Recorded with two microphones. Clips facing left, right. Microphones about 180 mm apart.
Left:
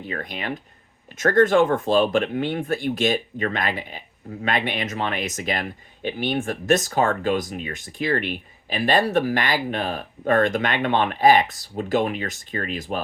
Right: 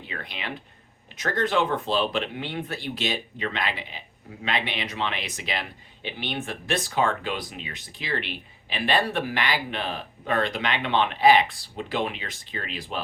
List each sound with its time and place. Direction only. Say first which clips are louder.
0.0 s speech: left 6 dB; 45° left (ahead or behind)